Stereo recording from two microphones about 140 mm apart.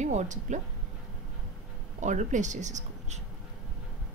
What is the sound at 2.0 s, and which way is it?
A woman's voice, 60° right (ahead or behind).